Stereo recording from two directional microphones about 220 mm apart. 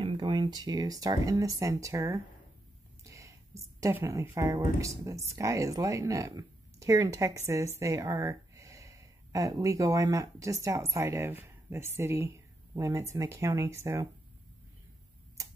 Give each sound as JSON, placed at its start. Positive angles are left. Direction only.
{"t": 0.0, "sound": "speech", "side_deg": -20}
{"t": 3.0, "sound": "a sound", "side_deg": -15}
{"t": 3.8, "sound": "speech", "side_deg": -15}